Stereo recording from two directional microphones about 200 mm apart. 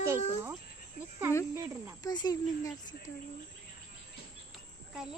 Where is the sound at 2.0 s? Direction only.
20° left (ahead or behind).